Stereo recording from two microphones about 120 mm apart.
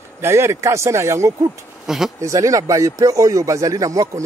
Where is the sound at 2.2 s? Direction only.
25° right (ahead or behind).